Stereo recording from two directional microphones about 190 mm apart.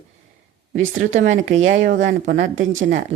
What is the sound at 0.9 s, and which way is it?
Speech, 40° right (ahead or behind).